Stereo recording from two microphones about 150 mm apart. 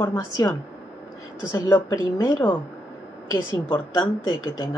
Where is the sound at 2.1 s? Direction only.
15° left (ahead or behind).